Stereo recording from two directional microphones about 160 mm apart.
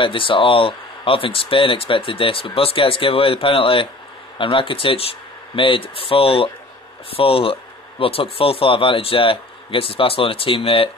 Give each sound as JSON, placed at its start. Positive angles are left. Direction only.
{"t": 0.0, "sound": "speech", "side_deg": 30}